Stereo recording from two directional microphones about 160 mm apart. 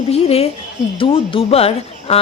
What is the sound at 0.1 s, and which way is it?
Speech, 40° left (ahead or behind).